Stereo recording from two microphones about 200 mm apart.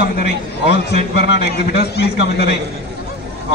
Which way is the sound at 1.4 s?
55° left (ahead or behind).